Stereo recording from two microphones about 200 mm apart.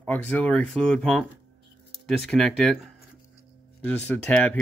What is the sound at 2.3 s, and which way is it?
Speech, centre (ahead or behind).